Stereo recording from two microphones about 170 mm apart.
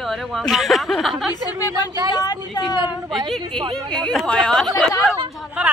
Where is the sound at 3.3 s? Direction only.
5° left (ahead or behind).